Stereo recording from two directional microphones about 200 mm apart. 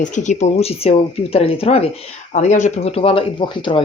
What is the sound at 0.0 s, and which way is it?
Speech, 35° left (ahead or behind).